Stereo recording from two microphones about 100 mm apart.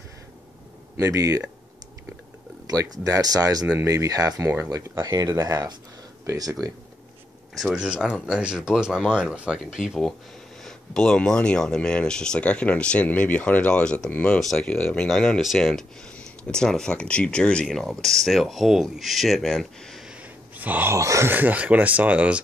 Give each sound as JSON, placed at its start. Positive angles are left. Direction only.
{"t": 0.9, "sound": "speech", "side_deg": -35}
{"t": 2.6, "sound": "speech", "side_deg": -40}
{"t": 7.6, "sound": "speech", "side_deg": -10}
{"t": 20.1, "sound": "gasp", "side_deg": -15}
{"t": 20.9, "sound": "speech", "side_deg": -30}
{"t": 21.3, "sound": "speech", "side_deg": -15}